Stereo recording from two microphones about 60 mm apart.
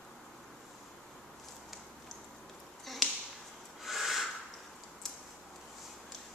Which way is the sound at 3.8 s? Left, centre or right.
Centre.